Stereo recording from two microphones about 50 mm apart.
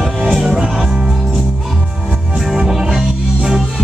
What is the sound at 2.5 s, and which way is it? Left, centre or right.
Music, centre.